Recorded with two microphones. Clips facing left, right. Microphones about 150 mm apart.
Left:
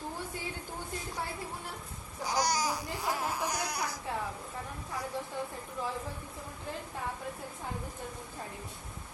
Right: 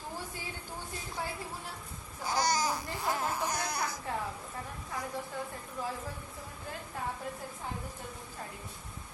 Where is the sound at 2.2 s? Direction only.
15° left (ahead or behind).